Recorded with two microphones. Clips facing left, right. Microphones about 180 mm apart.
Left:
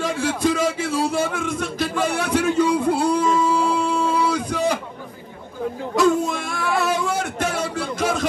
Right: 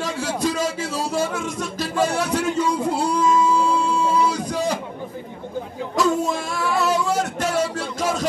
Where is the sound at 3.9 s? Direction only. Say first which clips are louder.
Even; 60° left (ahead or behind).